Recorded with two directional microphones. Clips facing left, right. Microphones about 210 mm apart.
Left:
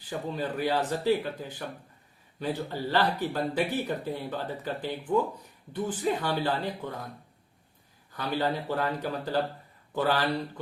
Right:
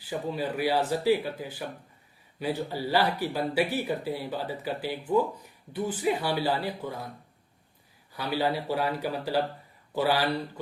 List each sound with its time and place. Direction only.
0.0 s speech: 10° right (ahead or behind)
8.1 s speech: 10° right (ahead or behind)